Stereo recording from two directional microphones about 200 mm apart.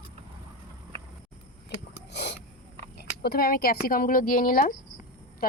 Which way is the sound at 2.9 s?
50° left (ahead or behind).